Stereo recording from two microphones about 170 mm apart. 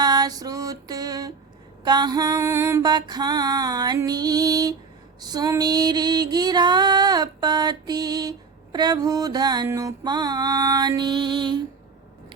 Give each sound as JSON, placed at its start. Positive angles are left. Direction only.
{"t": 0.0, "sound": "female singing", "side_deg": -25}